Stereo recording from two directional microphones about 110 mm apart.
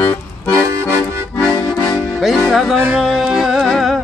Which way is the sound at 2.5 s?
Centre (ahead or behind).